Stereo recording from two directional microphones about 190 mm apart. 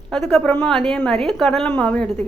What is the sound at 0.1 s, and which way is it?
A woman's voice, centre (ahead or behind).